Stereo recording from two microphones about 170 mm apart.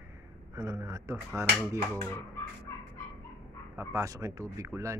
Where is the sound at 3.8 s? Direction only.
20° right (ahead or behind).